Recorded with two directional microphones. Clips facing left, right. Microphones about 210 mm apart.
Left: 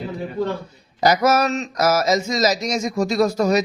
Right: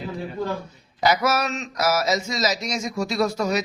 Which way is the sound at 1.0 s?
40° left (ahead or behind).